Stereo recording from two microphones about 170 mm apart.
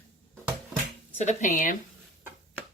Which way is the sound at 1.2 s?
45° left (ahead or behind).